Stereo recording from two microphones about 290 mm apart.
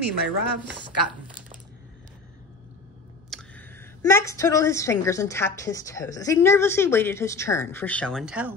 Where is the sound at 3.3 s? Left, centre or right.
Centre.